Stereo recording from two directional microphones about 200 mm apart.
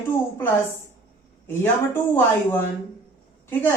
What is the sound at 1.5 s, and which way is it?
Speech, 10° left (ahead or behind).